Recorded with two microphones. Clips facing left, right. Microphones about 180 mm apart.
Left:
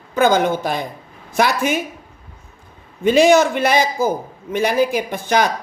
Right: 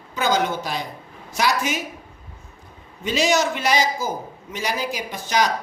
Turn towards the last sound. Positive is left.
turn(degrees=55)  # may be behind; listen again after turning